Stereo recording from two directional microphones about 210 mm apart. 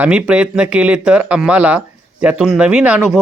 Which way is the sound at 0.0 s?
5° right (ahead or behind).